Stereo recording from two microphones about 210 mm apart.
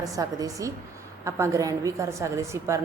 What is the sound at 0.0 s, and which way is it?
Speech, 15° right (ahead or behind).